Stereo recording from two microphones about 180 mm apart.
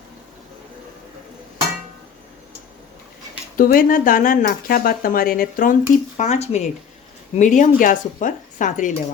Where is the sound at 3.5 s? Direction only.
50° left (ahead or behind).